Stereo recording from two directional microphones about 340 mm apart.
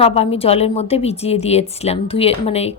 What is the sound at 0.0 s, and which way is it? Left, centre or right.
Speech, centre.